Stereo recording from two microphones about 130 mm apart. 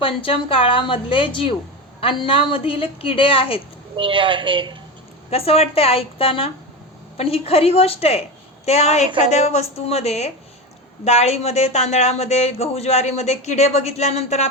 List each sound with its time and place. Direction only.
0.0 s a woman's voice: 45° left (ahead or behind)
3.9 s a woman's voice: 40° right (ahead or behind)
5.3 s a woman's voice: 50° left (ahead or behind)